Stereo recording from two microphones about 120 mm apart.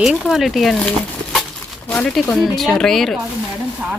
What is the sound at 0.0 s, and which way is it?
Speech, 5° right (ahead or behind).